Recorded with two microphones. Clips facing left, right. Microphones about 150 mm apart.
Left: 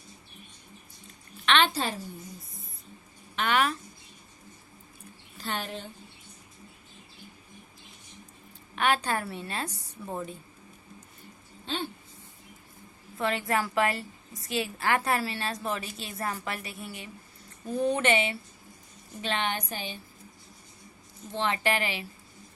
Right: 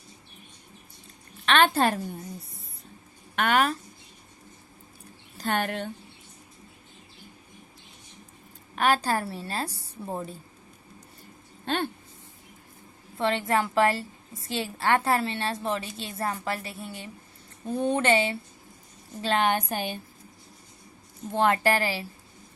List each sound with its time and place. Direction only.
1.5 s a woman's voice: 45° right (ahead or behind)
3.3 s a woman's voice: 45° right (ahead or behind)
5.4 s a woman's voice: 55° right (ahead or behind)
8.7 s a woman's voice: 40° right (ahead or behind)
11.6 s speech: 55° right (ahead or behind)
13.1 s a woman's voice: 30° right (ahead or behind)
19.2 s a woman's voice: 40° right (ahead or behind)
21.3 s a woman's voice: 45° right (ahead or behind)